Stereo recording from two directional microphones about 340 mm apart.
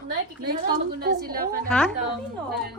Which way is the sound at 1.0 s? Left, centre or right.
Right.